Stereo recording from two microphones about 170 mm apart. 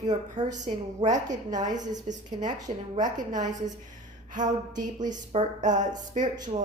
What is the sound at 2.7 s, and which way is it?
A woman's voice, 50° right (ahead or behind).